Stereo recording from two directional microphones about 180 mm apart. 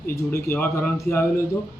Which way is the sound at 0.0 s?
10° left (ahead or behind).